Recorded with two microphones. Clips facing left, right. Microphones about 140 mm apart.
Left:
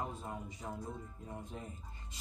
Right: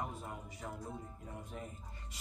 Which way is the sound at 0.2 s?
25° left (ahead or behind).